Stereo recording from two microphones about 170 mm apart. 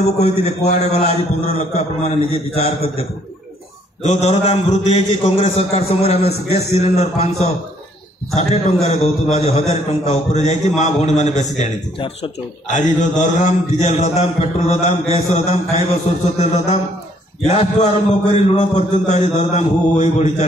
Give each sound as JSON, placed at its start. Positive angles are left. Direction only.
{"t": 0.0, "sound": "a man's voice", "side_deg": 40}